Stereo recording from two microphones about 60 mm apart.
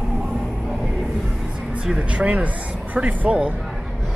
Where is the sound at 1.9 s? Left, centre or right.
Centre.